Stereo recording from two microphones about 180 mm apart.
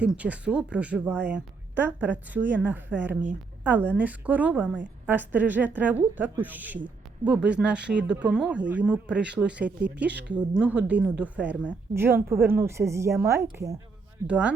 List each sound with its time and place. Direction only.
0.0 s a woman's voice: 5° right (ahead or behind)
10.1 s speech: 75° right (ahead or behind)
10.3 s a woman's voice: 5° right (ahead or behind)